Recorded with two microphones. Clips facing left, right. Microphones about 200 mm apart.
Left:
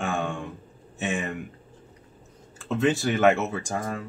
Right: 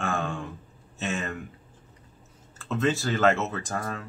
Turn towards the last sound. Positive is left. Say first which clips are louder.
# left 2 dB
turn(degrees=10)  # may be behind; listen again after turning